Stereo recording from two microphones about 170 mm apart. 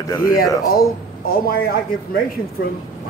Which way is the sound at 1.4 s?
60° left (ahead or behind).